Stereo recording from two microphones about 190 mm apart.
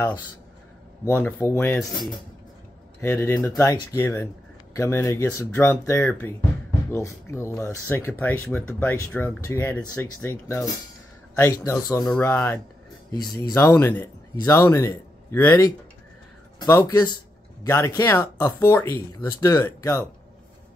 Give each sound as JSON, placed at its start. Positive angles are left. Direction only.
{"t": 1.0, "sound": "speech", "side_deg": 10}
{"t": 3.0, "sound": "speech", "side_deg": 15}
{"t": 13.7, "sound": "speech", "side_deg": 10}